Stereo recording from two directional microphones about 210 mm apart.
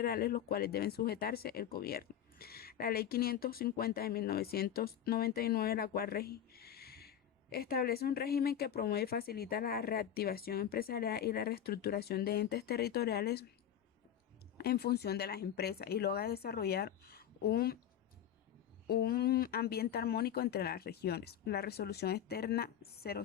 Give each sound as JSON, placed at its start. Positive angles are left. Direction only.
{"t": 0.0, "sound": "speech", "side_deg": 45}
{"t": 14.6, "sound": "speech", "side_deg": 50}
{"t": 18.9, "sound": "speech", "side_deg": 45}